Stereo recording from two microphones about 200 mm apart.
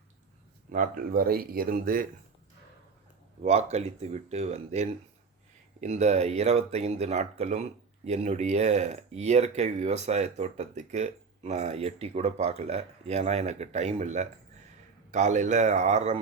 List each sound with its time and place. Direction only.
0.7 s speech: 45° right (ahead or behind)
3.4 s speech: 35° right (ahead or behind)